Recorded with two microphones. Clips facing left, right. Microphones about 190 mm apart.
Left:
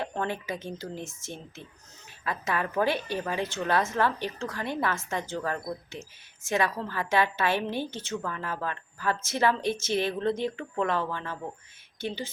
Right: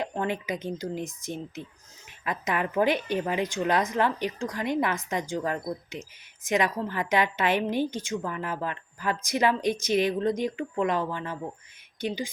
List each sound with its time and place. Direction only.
0.0 s a woman's voice: 15° right (ahead or behind)